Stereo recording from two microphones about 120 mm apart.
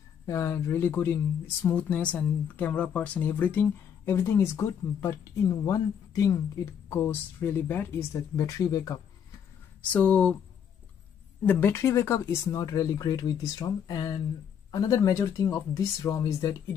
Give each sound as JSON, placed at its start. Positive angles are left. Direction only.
{"t": 0.3, "sound": "speech", "side_deg": 25}
{"t": 9.8, "sound": "speech", "side_deg": 10}
{"t": 11.4, "sound": "speech", "side_deg": 20}